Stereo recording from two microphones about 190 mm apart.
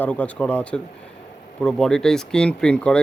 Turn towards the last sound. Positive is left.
turn(degrees=5)  # may be behind; listen again after turning